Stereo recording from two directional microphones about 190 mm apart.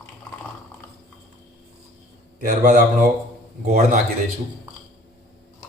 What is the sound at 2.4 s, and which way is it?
A man's voice, 40° right (ahead or behind).